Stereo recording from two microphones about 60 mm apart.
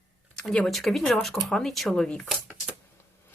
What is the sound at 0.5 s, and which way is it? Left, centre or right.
A woman's voice, centre.